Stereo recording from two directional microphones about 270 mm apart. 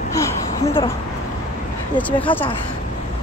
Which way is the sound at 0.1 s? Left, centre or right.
Centre.